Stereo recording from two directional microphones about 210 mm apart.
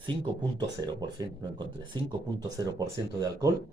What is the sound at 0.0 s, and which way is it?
Speech, 20° right (ahead or behind).